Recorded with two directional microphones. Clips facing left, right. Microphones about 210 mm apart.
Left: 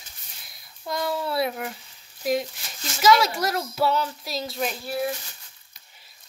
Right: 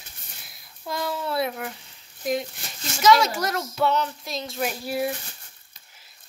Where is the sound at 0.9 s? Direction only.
Centre (ahead or behind).